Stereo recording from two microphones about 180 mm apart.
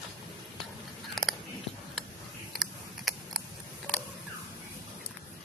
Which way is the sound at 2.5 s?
Centre (ahead or behind).